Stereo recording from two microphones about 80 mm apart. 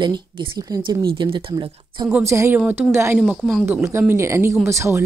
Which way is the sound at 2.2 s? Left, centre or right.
Right.